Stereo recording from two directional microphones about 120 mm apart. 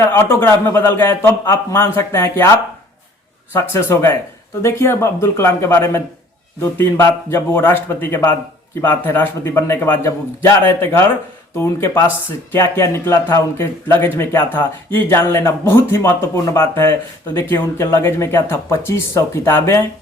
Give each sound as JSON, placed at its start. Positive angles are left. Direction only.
{"t": 0.0, "sound": "speech", "side_deg": 20}
{"t": 3.5, "sound": "a man's voice", "side_deg": 20}